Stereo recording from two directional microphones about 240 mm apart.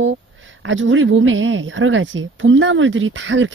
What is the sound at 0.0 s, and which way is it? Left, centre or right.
A woman's voice, right.